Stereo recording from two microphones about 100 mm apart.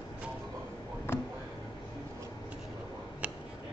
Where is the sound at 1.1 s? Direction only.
25° left (ahead or behind).